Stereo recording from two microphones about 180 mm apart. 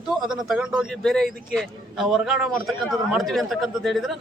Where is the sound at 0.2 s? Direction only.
Centre (ahead or behind).